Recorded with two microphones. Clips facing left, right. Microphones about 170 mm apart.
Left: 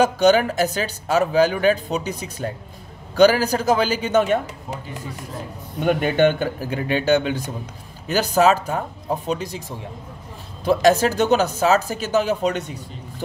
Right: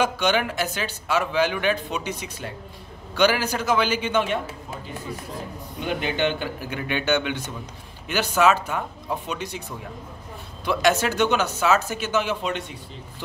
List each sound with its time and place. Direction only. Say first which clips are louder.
0.0 s speech: left 7 dB; 40° left (ahead or behind)
5.8 s speech: left 8 dB; 50° left (ahead or behind)
10.6 s speech: left 5 dB; 40° left (ahead or behind)